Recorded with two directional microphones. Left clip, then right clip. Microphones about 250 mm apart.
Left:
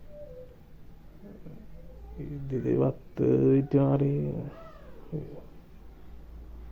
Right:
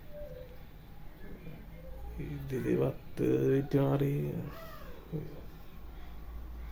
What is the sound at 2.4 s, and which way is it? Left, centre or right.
Speech, centre.